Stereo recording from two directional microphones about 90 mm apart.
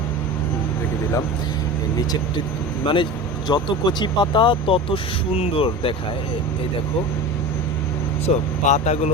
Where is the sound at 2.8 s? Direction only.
65° left (ahead or behind); by 5.9 s 85° left.